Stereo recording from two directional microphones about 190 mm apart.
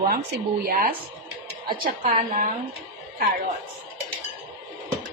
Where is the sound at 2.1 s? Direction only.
45° right (ahead or behind).